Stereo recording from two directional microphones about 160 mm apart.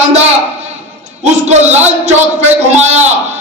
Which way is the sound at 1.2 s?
45° right (ahead or behind).